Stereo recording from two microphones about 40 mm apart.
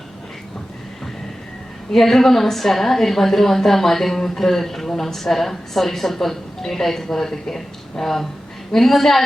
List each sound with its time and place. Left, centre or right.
1.9 s a woman's voice: centre